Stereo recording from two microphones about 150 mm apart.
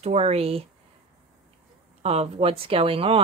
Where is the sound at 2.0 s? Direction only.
45° right (ahead or behind).